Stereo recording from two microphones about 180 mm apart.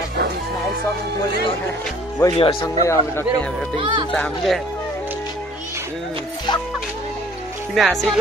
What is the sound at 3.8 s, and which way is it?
Speech, 25° right (ahead or behind).